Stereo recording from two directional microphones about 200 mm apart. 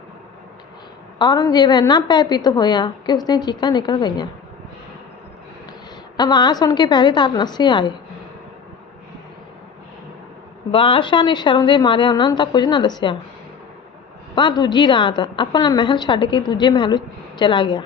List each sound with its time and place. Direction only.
1.2 s a woman's voice: 20° left (ahead or behind)
6.1 s a woman's voice: 20° left (ahead or behind)
10.7 s a woman's voice: 25° left (ahead or behind)
14.3 s a woman's voice: 20° left (ahead or behind)